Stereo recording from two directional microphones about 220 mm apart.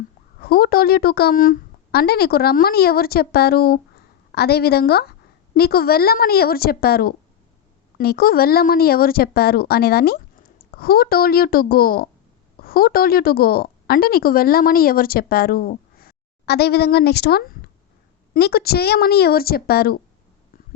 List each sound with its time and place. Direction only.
0.3 s a woman's voice: 45° left (ahead or behind)